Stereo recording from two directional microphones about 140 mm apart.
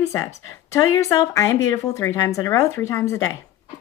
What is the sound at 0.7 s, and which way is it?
Speech, 20° left (ahead or behind).